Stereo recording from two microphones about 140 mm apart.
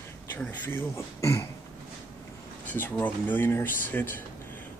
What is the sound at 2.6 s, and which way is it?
Speech, 10° left (ahead or behind).